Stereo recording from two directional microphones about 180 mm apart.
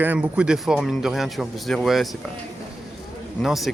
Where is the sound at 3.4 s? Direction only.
Centre (ahead or behind).